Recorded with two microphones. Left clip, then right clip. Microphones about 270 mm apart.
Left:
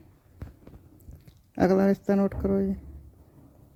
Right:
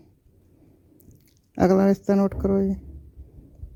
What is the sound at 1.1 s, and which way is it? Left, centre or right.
Speech, right.